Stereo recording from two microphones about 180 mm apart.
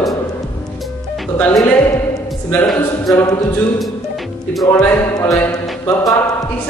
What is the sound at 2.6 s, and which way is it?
Speech, centre (ahead or behind).